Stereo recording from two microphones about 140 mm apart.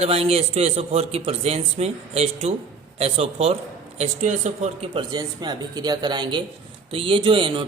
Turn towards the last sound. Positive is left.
turn(degrees=-40)  # may be behind; listen again after turning